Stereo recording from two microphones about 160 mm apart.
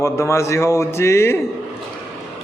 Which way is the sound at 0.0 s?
15° left (ahead or behind).